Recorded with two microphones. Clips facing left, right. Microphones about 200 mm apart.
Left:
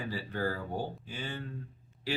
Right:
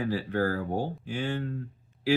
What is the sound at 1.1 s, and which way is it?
Speech, 65° right (ahead or behind).